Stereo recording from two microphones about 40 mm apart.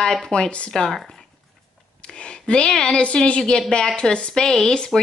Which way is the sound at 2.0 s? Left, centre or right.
Left.